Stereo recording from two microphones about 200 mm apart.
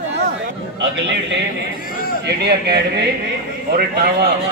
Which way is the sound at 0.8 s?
65° right (ahead or behind).